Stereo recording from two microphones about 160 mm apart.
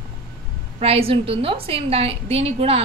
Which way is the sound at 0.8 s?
35° right (ahead or behind).